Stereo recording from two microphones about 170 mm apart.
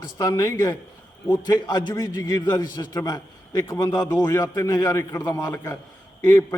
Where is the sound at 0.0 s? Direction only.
20° left (ahead or behind).